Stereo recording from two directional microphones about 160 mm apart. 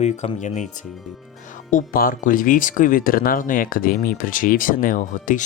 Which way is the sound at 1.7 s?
60° left (ahead or behind).